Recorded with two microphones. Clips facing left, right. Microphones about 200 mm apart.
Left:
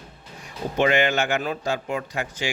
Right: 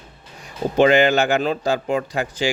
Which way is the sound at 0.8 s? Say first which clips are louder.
Right 6 dB; 35° right (ahead or behind).